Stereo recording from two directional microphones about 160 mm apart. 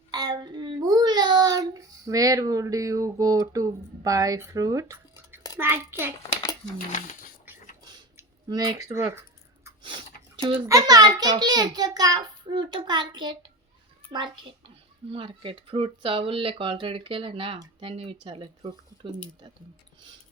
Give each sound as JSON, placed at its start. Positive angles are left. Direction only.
{"t": 0.1, "sound": "a child's voice", "side_deg": -25}
{"t": 8.4, "sound": "a child's voice", "side_deg": -25}
{"t": 9.8, "sound": "a sound", "side_deg": -30}
{"t": 10.7, "sound": "a child's voice", "side_deg": -25}